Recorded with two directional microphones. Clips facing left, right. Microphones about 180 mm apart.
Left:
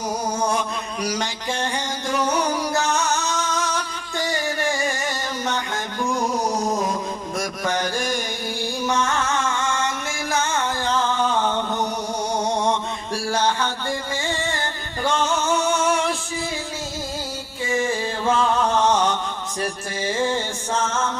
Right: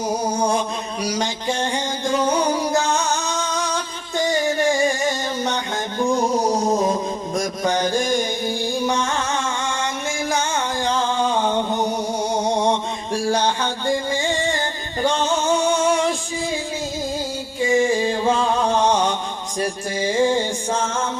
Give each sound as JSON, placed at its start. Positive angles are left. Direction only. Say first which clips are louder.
{"t": 1.2, "sound": "music", "louder": "right 3 dB", "side_deg": -20}
{"t": 6.7, "sound": "mantra", "louder": "right 4 dB", "side_deg": -25}
{"t": 10.2, "sound": "music", "louder": "left 1 dB", "side_deg": -15}
{"t": 13.1, "sound": "music", "louder": "right 2 dB", "side_deg": -15}
{"t": 17.6, "sound": "music", "louder": "right 6 dB", "side_deg": -15}